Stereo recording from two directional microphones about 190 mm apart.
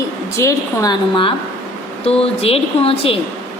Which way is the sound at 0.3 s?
15° left (ahead or behind).